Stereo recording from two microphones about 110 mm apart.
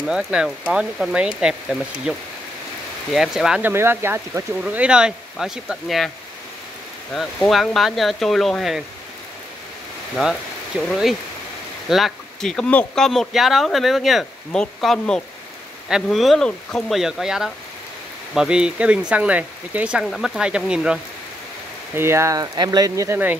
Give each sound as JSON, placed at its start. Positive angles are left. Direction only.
{"t": 0.0, "sound": "speech", "side_deg": -5}
{"t": 3.6, "sound": "speech", "side_deg": -20}
{"t": 7.2, "sound": "speech", "side_deg": 0}
{"t": 10.9, "sound": "speech", "side_deg": 0}
{"t": 21.9, "sound": "speech", "side_deg": -25}